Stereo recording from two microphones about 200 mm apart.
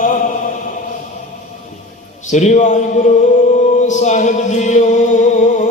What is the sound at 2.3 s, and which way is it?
Chant, 35° left (ahead or behind).